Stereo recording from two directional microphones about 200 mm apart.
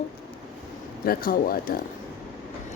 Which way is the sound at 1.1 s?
45° left (ahead or behind).